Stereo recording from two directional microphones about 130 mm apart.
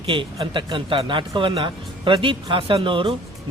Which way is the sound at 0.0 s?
45° right (ahead or behind).